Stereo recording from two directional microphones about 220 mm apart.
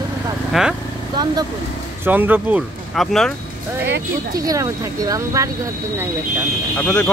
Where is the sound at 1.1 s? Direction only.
20° right (ahead or behind).